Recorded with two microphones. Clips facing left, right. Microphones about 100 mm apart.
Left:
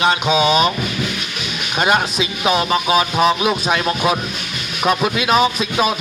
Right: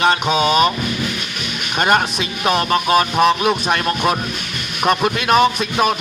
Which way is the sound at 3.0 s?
5° left (ahead or behind).